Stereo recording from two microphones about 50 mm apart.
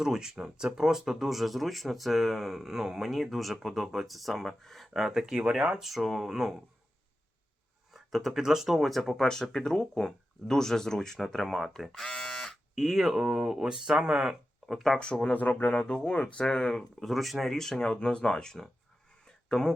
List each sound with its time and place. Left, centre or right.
0.0 s speech: centre
4.9 s speech: centre
5.8 s speech: centre
7.9 s a sound: centre
8.3 s speech: centre
12.0 s electric shaver: centre
12.7 s speech: centre
14.7 s speech: centre
14.9 s speech: centre
15.3 s speech: left
15.6 s speech: centre
16.7 s speech: centre